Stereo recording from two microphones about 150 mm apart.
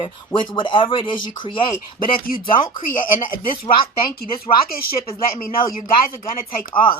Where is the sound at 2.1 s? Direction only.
70° left (ahead or behind).